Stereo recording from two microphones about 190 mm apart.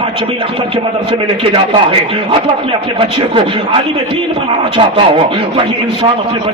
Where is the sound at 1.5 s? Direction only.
25° right (ahead or behind).